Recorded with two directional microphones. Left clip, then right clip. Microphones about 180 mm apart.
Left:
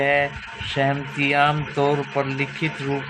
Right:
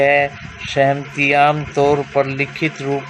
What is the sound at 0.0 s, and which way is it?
Speech, 50° right (ahead or behind).